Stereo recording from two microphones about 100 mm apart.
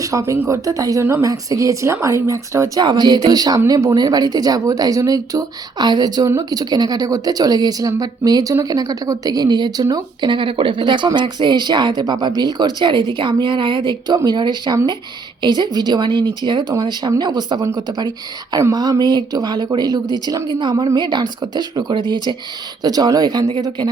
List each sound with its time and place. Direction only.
0.0 s speech: 30° right (ahead or behind)
2.8 s a woman's voice: 50° right (ahead or behind)